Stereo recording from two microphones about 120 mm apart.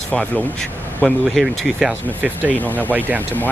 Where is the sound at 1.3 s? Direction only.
Centre (ahead or behind).